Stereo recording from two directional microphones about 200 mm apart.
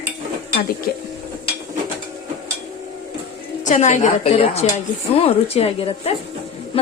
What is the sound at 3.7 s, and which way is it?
A woman's voice, 35° left (ahead or behind).